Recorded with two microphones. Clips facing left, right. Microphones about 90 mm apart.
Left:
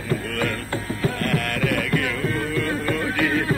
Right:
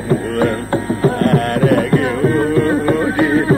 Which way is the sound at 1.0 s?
35° right (ahead or behind).